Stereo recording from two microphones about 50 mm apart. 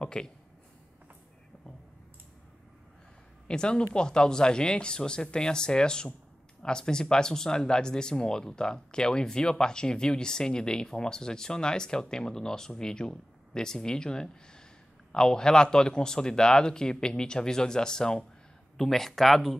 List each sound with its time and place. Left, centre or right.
0.0 s speech: centre
3.4 s speech: centre